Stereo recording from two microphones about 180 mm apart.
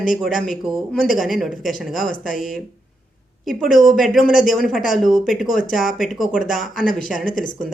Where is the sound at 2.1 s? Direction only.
50° left (ahead or behind).